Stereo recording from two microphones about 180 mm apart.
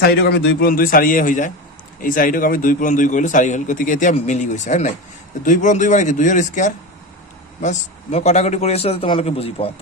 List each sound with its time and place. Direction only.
0.0 s a man's voice: 60° left (ahead or behind); by 9.7 s 35° left (ahead or behind)